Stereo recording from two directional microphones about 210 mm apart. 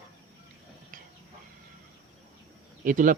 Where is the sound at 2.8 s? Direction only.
40° right (ahead or behind).